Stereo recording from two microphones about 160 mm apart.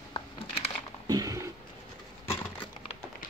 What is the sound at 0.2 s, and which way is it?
Crumpling, 35° left (ahead or behind).